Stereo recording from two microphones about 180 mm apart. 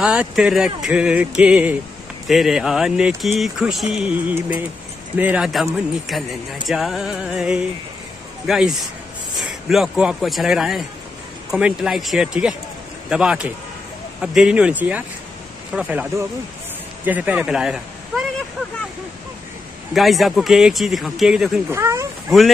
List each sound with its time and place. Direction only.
0.0 s speech: 5° right (ahead or behind)
19.9 s speech: centre (ahead or behind)
21.6 s speech: 15° right (ahead or behind)